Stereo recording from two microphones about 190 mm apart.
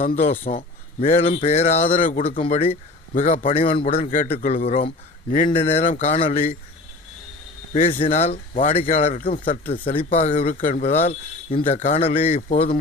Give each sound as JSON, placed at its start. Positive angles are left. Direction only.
{"t": 0.3, "sound": "speech", "side_deg": 40}
{"t": 2.4, "sound": "speech", "side_deg": 30}
{"t": 3.2, "sound": "speech", "side_deg": 40}
{"t": 5.5, "sound": "speech", "side_deg": 30}
{"t": 5.8, "sound": "speech", "side_deg": 40}
{"t": 7.7, "sound": "speech", "side_deg": 40}
{"t": 9.8, "sound": "speech", "side_deg": 30}